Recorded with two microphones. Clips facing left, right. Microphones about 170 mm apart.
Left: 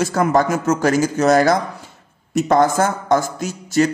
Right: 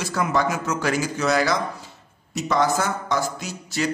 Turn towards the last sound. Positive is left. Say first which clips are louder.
# left 9 dB
turn(degrees=45)  # may be behind; listen again after turning